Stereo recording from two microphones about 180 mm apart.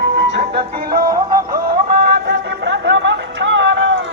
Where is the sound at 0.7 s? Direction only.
55° right (ahead or behind).